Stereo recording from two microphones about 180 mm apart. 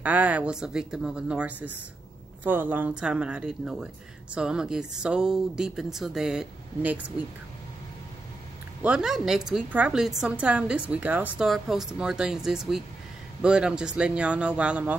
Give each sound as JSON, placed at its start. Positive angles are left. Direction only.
{"t": 0.0, "sound": "speech", "side_deg": -10}
{"t": 8.8, "sound": "speech", "side_deg": -5}